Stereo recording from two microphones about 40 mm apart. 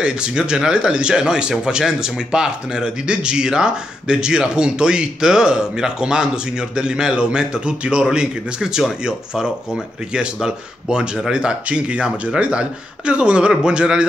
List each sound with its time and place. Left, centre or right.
0.0 s speech: right